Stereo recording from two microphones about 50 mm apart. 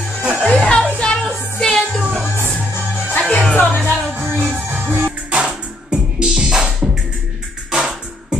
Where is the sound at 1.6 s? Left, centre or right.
Centre.